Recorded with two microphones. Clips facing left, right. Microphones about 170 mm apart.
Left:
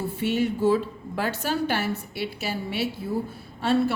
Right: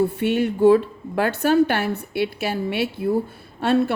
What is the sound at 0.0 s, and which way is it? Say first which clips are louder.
A woman's voice: right 5 dB; 60° right (ahead or behind).